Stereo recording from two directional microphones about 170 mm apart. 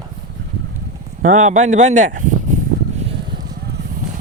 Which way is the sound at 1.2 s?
45° right (ahead or behind).